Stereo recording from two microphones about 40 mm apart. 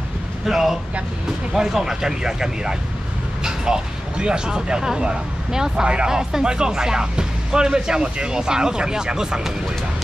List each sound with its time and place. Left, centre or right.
0.5 s speech: centre